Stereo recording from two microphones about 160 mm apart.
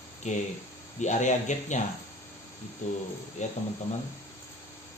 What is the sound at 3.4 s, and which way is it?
Speech, 45° left (ahead or behind).